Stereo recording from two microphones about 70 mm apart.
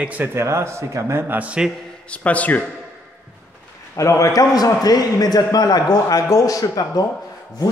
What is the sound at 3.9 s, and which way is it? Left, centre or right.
A man's voice, left.